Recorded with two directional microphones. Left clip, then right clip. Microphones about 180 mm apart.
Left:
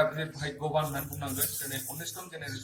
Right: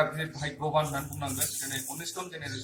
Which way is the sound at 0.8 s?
15° left (ahead or behind).